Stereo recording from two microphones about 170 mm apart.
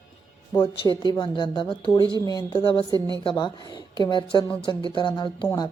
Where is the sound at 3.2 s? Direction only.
30° left (ahead or behind).